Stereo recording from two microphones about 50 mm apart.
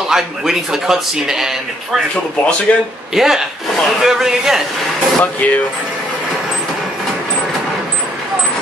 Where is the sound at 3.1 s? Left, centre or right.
Centre.